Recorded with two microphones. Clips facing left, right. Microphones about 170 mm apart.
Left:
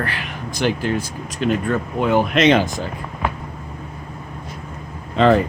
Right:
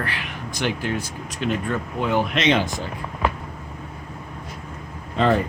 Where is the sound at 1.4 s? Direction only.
50° left (ahead or behind).